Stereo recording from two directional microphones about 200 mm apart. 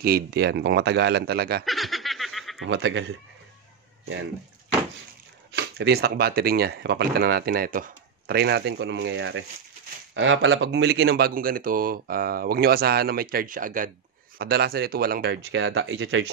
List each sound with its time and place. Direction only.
0.0 s speech: 50° right (ahead or behind)
1.7 s snicker: centre (ahead or behind)
2.6 s speech: 65° right (ahead or behind)
5.5 s speech: 55° right (ahead or behind); by 16.3 s 75° right (ahead or behind)